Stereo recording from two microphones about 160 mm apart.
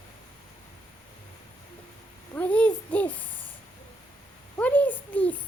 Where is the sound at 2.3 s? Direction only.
10° left (ahead or behind).